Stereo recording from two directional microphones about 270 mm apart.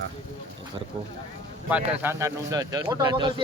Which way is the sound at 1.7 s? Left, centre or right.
Centre.